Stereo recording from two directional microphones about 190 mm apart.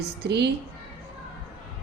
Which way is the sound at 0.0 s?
60° right (ahead or behind).